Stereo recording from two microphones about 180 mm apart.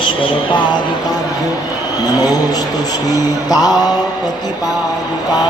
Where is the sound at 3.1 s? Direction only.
20° left (ahead or behind).